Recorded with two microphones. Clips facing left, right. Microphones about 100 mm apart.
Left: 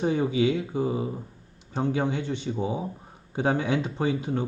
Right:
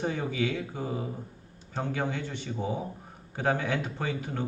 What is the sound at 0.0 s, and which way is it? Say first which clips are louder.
Speech: left 6 dB; 20° left (ahead or behind).